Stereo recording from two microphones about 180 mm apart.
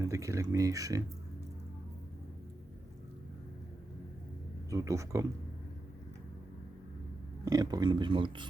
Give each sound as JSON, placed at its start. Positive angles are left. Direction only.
{"t": 0.1, "sound": "speech", "side_deg": -15}
{"t": 4.7, "sound": "speech", "side_deg": -20}
{"t": 7.4, "sound": "speech", "side_deg": -20}